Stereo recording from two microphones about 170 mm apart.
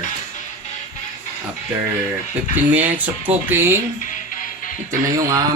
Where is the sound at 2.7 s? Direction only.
10° right (ahead or behind).